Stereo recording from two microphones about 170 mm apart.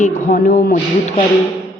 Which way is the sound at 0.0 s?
55° left (ahead or behind).